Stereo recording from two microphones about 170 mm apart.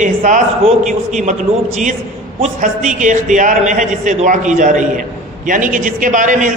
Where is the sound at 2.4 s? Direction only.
45° right (ahead or behind).